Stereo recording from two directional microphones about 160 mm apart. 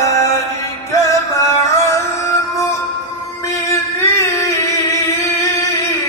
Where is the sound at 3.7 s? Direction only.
20° left (ahead or behind).